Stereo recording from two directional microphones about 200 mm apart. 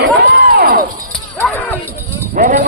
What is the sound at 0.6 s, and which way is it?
Shatter, 50° right (ahead or behind).